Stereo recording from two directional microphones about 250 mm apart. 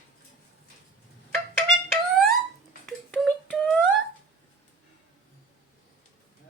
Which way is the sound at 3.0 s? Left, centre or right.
Centre.